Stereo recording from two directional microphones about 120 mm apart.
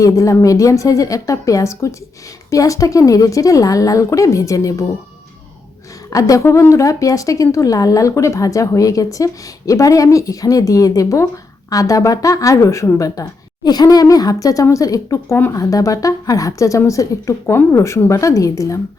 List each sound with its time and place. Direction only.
0.0 s a woman's voice: 25° left (ahead or behind)
6.1 s a woman's voice: 30° left (ahead or behind)